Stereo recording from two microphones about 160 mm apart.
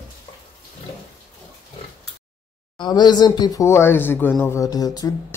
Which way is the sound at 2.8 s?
25° left (ahead or behind).